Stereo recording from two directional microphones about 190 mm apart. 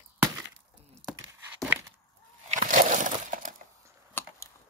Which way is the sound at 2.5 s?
40° right (ahead or behind).